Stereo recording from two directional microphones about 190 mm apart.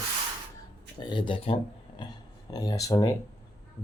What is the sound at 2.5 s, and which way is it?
Speech, 20° left (ahead or behind).